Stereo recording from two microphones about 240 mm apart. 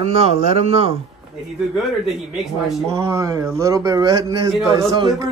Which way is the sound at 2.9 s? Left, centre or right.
Centre.